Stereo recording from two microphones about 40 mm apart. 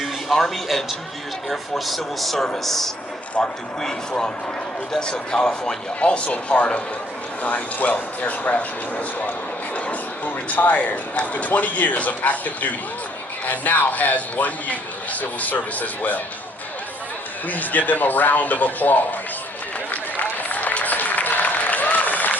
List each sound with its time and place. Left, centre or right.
0.0 s a man's voice: centre
4.9 s a man's voice: centre; by 16.2 s left
17.5 s a man's voice: left
20.1 s applause: left